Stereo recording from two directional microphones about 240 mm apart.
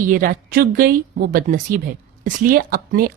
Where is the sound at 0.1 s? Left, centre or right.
Right.